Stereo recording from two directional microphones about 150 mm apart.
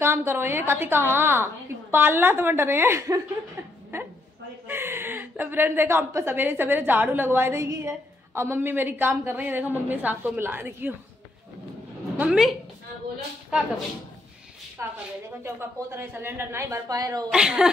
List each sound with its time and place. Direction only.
0.0 s a woman's voice: 15° right (ahead or behind)
4.6 s a woman's voice: 15° right (ahead or behind)
12.2 s a woman's voice: centre (ahead or behind)
14.8 s a woman's voice: 15° right (ahead or behind)
17.3 s a woman's voice: 5° right (ahead or behind)